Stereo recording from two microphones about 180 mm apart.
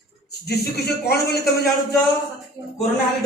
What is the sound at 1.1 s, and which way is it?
Speech, 60° left (ahead or behind).